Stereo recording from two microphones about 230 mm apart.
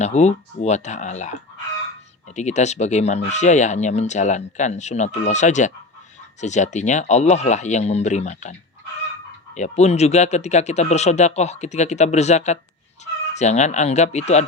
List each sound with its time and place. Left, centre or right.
0.0 s speech: left
9.6 s speech: left